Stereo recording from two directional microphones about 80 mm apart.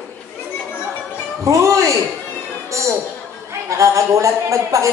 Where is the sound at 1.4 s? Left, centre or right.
Right.